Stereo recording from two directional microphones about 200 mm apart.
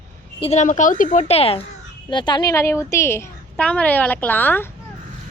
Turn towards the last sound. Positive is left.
turn(degrees=10)  # may be behind; listen again after turning